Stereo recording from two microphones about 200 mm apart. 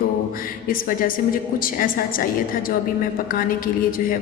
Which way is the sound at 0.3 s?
45° left (ahead or behind).